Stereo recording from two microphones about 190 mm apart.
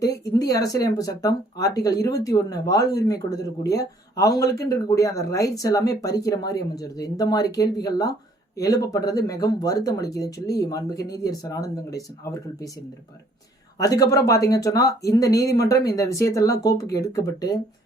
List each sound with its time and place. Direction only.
0.0 s speech: 20° left (ahead or behind)
13.7 s speech: 20° left (ahead or behind)